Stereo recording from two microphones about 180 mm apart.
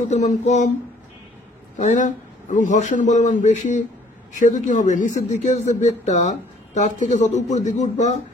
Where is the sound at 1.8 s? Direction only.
45° left (ahead or behind).